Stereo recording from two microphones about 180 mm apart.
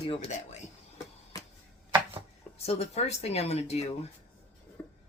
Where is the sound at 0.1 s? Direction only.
40° left (ahead or behind).